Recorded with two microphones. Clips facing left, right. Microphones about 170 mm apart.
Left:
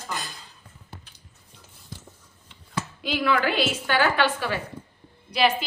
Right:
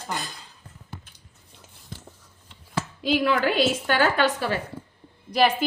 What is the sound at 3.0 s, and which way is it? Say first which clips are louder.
A woman's voice: right 2 dB; 45° right (ahead or behind).